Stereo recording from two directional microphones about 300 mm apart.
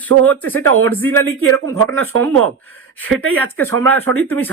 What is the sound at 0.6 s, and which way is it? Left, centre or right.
Speech, right.